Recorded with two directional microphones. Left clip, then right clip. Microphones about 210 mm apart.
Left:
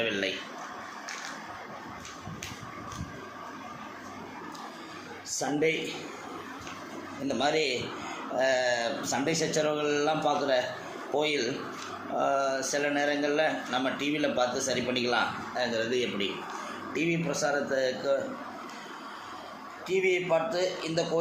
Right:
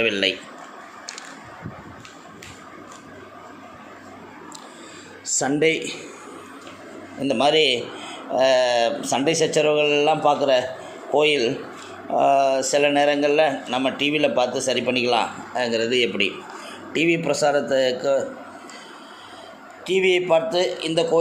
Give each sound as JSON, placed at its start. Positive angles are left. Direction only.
{"t": 0.0, "sound": "speech", "side_deg": -50}
{"t": 5.4, "sound": "speech", "side_deg": -45}
{"t": 7.3, "sound": "a man's voice", "side_deg": -40}
{"t": 19.9, "sound": "speech", "side_deg": -45}